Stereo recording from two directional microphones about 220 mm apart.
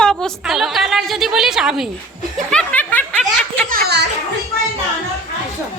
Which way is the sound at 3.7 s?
50° right (ahead or behind).